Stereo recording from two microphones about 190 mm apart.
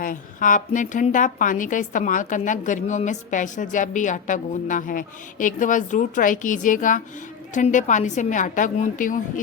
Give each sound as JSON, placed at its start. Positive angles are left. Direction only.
{"t": 0.0, "sound": "a woman's voice", "side_deg": 45}